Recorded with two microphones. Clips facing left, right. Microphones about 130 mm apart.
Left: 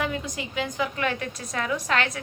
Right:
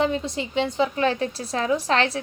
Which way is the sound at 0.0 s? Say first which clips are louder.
Right 6 dB; 30° right (ahead or behind).